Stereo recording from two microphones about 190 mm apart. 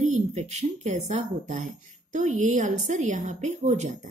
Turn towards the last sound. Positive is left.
turn(degrees=-35)  # may be behind; listen again after turning